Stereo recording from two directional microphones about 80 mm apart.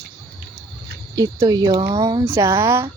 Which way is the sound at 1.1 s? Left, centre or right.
Right.